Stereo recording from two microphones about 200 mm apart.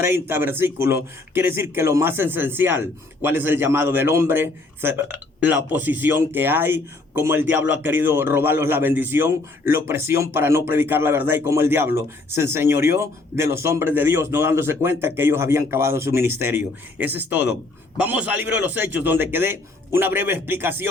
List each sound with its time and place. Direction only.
0.0 s speech: 10° right (ahead or behind)